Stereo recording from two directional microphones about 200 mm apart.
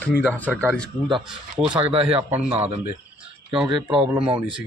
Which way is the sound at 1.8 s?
25° right (ahead or behind).